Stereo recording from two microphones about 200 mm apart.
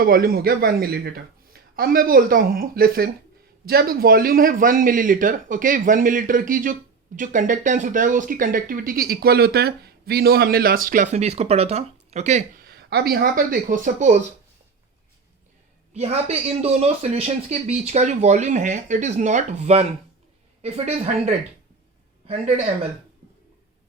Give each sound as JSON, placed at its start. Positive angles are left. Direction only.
{"t": 0.0, "sound": "speech", "side_deg": -45}
{"t": 12.6, "sound": "speech", "side_deg": -55}
{"t": 15.9, "sound": "speech", "side_deg": -35}